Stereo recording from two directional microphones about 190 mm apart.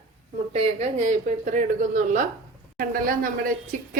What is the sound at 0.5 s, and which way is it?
A woman's voice, 35° right (ahead or behind).